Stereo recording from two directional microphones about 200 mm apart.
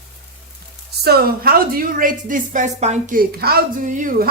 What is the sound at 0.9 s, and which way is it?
A woman's voice, 50° right (ahead or behind).